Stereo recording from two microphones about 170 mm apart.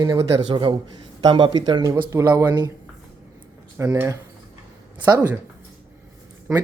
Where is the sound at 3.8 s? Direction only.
20° right (ahead or behind).